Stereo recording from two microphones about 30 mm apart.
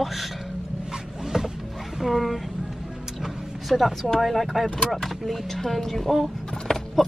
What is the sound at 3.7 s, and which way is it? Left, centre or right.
Speech, centre.